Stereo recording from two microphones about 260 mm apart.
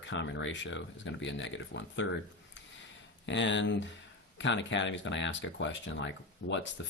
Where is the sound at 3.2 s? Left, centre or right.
Left.